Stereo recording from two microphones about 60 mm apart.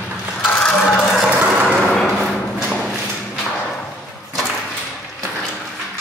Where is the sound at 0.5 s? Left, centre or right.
Centre.